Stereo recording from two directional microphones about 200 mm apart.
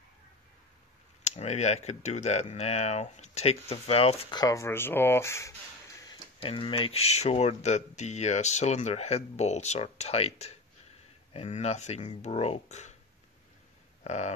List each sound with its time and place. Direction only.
1.2 s speech: 35° left (ahead or behind); by 6.1 s 15° left (ahead or behind)
6.4 s speech: 25° left (ahead or behind)
14.0 s speech: 35° left (ahead or behind)